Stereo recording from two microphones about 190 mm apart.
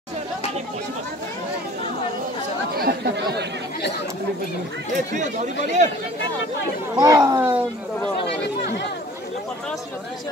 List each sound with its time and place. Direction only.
2.8 s speech: 55° right (ahead or behind)
5.1 s speech: 40° right (ahead or behind)
7.0 s speech: 15° right (ahead or behind)